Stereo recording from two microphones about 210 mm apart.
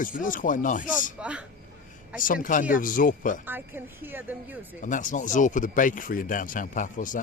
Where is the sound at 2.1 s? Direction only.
40° left (ahead or behind).